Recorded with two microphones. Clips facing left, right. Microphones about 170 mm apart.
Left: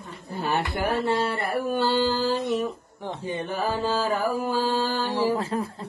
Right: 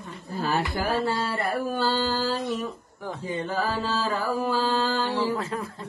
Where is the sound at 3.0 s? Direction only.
20° left (ahead or behind).